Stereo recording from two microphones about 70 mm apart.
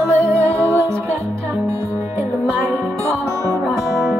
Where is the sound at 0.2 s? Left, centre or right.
Right.